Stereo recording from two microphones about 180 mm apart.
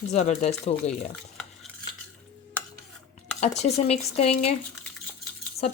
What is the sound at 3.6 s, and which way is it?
Speech, 35° left (ahead or behind).